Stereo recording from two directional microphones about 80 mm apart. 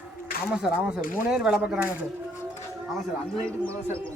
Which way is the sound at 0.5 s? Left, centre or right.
Centre.